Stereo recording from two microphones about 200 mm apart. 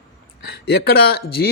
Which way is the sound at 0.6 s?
55° left (ahead or behind).